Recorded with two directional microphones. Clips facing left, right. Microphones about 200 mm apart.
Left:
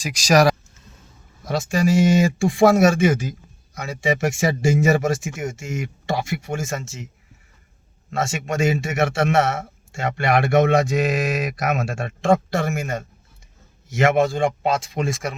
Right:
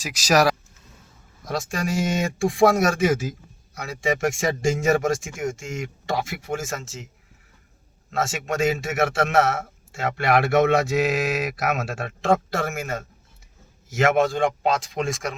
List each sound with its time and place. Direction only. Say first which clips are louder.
0.0 s speech: left 3 dB; 5° right (ahead or behind)
8.1 s speech: left 1 dB; centre (ahead or behind)